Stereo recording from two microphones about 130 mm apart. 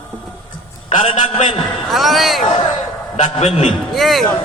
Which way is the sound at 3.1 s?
50° left (ahead or behind).